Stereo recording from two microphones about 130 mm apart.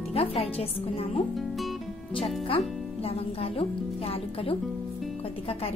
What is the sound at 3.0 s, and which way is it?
Speech, 50° left (ahead or behind).